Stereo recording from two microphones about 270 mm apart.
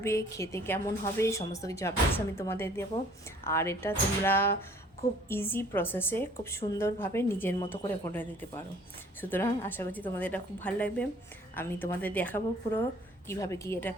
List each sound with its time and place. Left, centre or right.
0.0 s a woman's voice: centre